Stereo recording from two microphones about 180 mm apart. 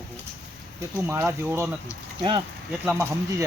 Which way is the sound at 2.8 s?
5° right (ahead or behind).